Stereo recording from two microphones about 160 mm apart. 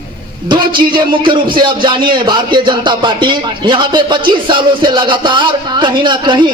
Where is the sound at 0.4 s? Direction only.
30° right (ahead or behind).